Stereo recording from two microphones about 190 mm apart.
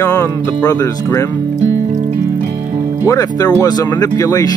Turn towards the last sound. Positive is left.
turn(degrees=20)  # may be behind; listen again after turning